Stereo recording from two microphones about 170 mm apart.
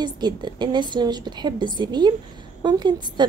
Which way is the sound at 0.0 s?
25° right (ahead or behind).